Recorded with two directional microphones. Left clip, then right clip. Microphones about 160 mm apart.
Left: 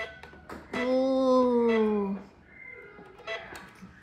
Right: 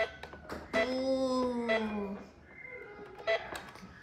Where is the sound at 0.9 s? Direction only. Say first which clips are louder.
Left 7 dB; 15° left (ahead or behind).